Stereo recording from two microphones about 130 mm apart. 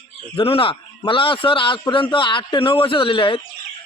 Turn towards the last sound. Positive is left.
turn(degrees=40)  # may be behind; listen again after turning